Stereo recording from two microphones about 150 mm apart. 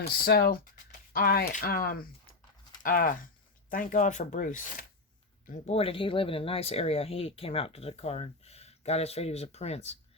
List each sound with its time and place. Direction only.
0.1 s speech: 90° left
1.1 s speech: 75° left (ahead or behind); by 4.9 s 60° left (ahead or behind)
5.5 s speech: 45° left (ahead or behind)